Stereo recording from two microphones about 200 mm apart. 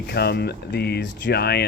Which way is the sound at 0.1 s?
55° left (ahead or behind).